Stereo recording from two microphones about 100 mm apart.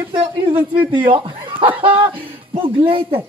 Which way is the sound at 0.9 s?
60° right (ahead or behind).